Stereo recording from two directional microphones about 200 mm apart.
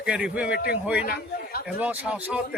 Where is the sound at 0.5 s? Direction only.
50° left (ahead or behind).